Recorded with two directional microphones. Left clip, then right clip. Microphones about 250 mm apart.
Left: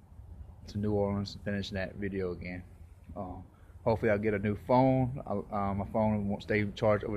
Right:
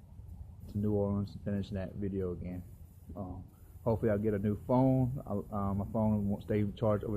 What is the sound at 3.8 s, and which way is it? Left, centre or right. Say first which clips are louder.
Speech: left 3 dB; centre.